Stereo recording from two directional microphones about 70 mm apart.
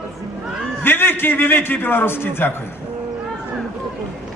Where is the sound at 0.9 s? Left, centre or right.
Left.